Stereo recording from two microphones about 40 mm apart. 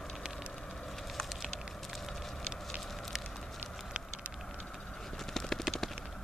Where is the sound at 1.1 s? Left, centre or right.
Centre.